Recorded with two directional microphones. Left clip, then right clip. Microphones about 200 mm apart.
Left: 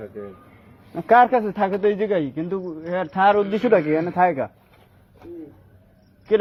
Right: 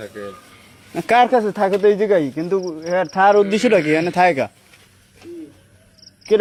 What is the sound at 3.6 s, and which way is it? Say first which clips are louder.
Speech: right 3 dB; 50° right (ahead or behind).